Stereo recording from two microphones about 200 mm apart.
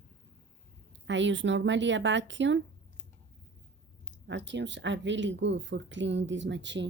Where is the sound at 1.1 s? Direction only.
65° right (ahead or behind).